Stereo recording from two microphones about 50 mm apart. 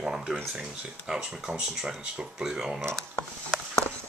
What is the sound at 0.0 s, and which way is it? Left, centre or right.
Speech, centre.